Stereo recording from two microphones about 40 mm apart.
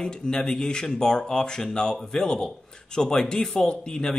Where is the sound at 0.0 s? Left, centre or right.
Centre.